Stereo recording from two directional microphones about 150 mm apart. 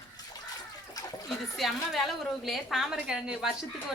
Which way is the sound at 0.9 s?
25° left (ahead or behind).